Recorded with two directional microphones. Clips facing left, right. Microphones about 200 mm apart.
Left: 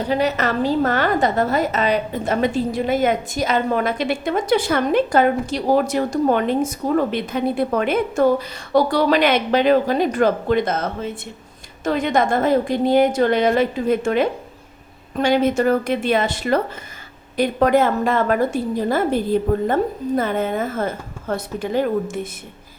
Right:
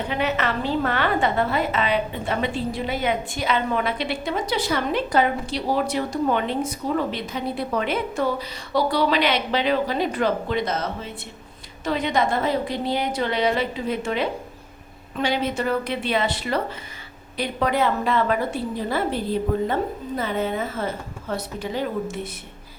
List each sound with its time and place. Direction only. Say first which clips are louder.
0.1 s a woman's voice: left 5 dB; 40° left (ahead or behind)